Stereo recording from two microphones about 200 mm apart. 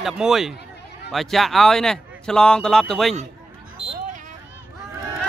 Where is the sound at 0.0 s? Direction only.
Centre (ahead or behind).